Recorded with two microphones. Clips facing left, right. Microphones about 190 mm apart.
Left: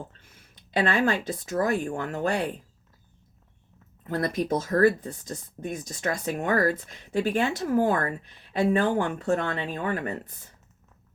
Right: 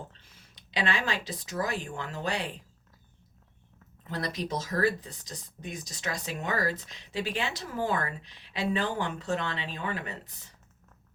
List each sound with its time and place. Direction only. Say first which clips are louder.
0.1 s speech: left 2 dB; 50° left (ahead or behind)
4.1 s speech: left 7 dB; 50° left (ahead or behind)